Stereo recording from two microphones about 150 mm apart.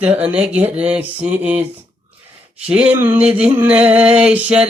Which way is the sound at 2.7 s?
10° right (ahead or behind).